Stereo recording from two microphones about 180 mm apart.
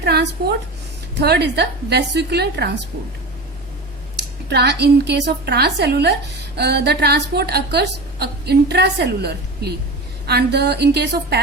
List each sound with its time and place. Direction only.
0.0 s a woman's voice: 65° right (ahead or behind)
4.4 s a woman's voice: 70° right (ahead or behind)